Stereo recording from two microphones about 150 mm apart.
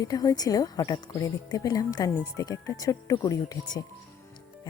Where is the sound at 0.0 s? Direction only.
25° left (ahead or behind).